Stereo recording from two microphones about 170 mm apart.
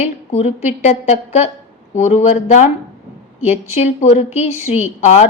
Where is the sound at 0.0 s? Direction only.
40° left (ahead or behind).